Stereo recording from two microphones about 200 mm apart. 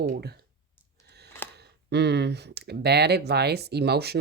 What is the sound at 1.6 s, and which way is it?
Speech, 55° right (ahead or behind).